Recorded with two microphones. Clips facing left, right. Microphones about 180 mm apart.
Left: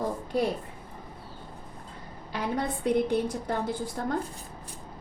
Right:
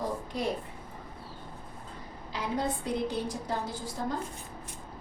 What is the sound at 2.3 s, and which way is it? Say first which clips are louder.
A woman's voice: left 2 dB; 60° left (ahead or behind).